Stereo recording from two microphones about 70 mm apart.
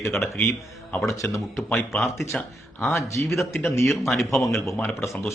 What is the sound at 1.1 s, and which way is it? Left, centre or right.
Speech, left.